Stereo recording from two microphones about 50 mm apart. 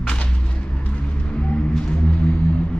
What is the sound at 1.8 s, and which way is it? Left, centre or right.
Music, left.